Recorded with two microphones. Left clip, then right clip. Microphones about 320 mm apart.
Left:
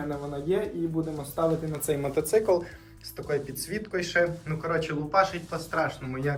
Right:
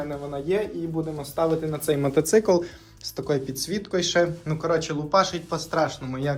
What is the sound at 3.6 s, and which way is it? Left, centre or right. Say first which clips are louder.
Speech: right 5 dB; centre.